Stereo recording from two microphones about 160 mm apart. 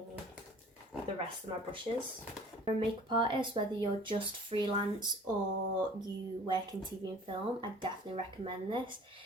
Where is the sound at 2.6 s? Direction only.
30° right (ahead or behind).